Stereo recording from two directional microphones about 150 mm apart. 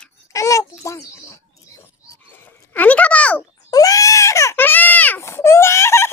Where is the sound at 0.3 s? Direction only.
20° left (ahead or behind).